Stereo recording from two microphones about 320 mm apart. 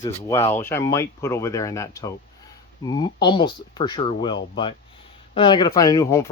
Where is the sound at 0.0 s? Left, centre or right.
Centre.